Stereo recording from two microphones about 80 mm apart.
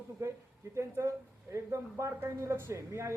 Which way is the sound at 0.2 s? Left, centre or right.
Right.